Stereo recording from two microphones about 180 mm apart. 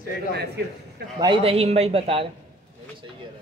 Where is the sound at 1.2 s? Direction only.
30° right (ahead or behind).